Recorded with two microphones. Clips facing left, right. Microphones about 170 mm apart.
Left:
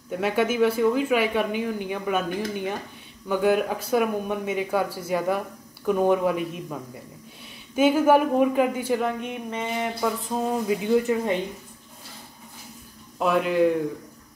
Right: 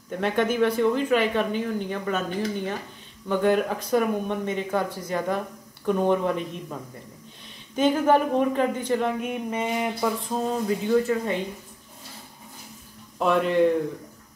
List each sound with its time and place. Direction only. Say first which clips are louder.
0.1 s speech: even; 5° left (ahead or behind)
9.2 s a sound: right 3 dB; 10° right (ahead or behind)
10.0 s a man's voice: left 2 dB; centre (ahead or behind)
10.5 s speech: left 1 dB; 15° left (ahead or behind)
13.2 s a man's voice: even; 5° left (ahead or behind)